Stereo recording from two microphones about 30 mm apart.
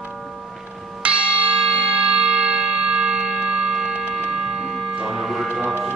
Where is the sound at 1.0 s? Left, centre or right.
Right.